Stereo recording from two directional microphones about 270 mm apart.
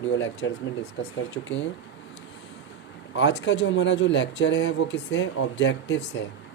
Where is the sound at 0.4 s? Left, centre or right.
Left.